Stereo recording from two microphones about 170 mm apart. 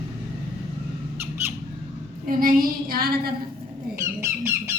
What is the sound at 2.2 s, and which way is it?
Child singing, 55° right (ahead or behind).